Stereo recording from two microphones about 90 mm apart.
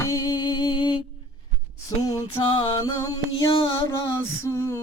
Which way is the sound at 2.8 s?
45° left (ahead or behind).